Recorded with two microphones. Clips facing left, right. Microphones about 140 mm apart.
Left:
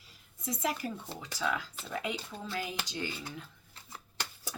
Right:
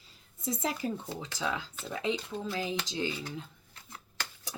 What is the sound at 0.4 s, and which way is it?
Speech, 25° right (ahead or behind).